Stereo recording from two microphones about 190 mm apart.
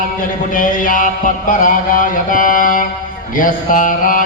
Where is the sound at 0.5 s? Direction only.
45° left (ahead or behind).